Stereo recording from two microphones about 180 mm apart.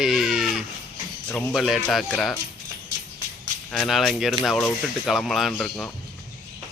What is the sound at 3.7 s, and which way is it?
Speech, centre (ahead or behind).